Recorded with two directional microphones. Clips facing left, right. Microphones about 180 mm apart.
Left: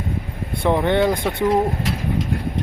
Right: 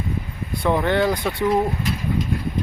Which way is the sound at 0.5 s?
25° left (ahead or behind).